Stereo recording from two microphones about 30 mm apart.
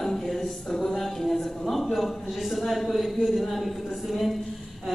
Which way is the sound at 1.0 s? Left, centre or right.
Centre.